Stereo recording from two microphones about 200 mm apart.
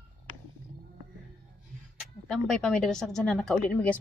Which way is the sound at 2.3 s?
Centre (ahead or behind).